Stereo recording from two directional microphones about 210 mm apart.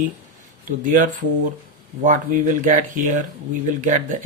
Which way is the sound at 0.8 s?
40° right (ahead or behind).